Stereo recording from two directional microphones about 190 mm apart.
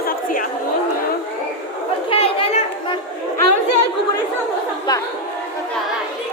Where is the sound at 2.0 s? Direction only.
30° left (ahead or behind).